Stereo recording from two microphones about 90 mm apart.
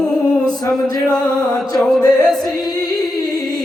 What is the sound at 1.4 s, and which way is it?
Music, 40° left (ahead or behind).